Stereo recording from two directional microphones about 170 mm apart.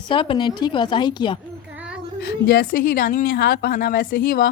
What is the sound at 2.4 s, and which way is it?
Speech, 60° left (ahead or behind).